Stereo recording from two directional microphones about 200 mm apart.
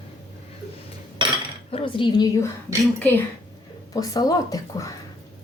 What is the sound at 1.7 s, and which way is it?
Speech, 25° left (ahead or behind).